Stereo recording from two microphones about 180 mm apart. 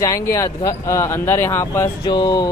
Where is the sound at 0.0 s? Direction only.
15° left (ahead or behind).